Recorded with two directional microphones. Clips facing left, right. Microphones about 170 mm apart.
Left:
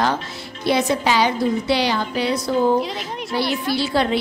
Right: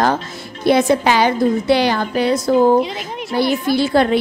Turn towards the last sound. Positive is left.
turn(degrees=-50)  # may be behind; listen again after turning